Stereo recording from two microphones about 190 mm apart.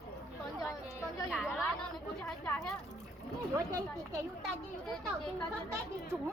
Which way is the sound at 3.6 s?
20° right (ahead or behind).